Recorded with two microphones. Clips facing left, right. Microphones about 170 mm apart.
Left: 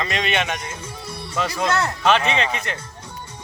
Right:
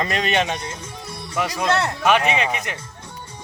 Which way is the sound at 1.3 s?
15° right (ahead or behind).